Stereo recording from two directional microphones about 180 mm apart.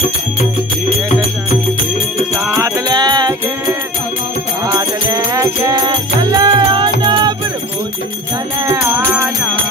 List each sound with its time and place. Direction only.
2.6 s music: 20° right (ahead or behind)
4.7 s music: 20° right (ahead or behind)